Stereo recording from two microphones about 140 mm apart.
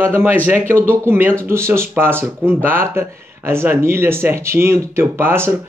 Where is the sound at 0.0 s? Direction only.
15° right (ahead or behind).